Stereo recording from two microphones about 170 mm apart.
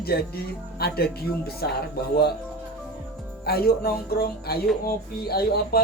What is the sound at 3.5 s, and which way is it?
Speech, 65° left (ahead or behind).